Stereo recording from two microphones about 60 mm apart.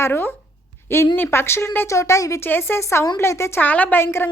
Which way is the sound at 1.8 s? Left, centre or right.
Left.